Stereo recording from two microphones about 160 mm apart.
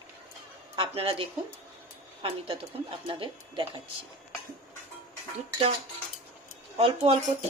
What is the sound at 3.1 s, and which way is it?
Speech, 30° right (ahead or behind).